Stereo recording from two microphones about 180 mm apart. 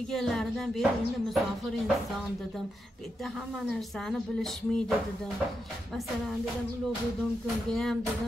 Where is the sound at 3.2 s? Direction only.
Centre (ahead or behind).